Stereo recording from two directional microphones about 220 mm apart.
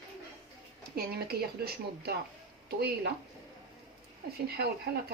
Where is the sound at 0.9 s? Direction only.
45° right (ahead or behind).